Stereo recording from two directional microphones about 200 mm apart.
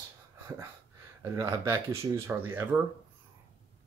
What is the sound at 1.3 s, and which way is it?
Speech, 15° right (ahead or behind).